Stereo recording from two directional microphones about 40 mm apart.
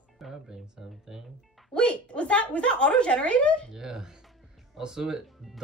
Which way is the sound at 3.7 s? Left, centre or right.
Centre.